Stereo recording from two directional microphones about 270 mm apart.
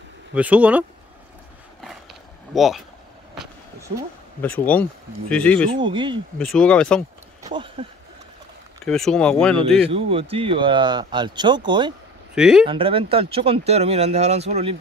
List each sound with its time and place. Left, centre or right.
0.3 s speech: centre
1.8 s a sound: centre
4.4 s speech: centre
5.7 s speech: centre
6.3 s speech: centre
7.4 s speech: centre
8.8 s speech: centre
9.8 s speech: right
12.4 s speech: centre
12.6 s speech: centre